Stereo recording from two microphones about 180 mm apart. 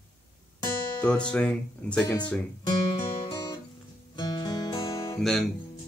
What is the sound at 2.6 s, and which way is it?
Guitar, 25° left (ahead or behind).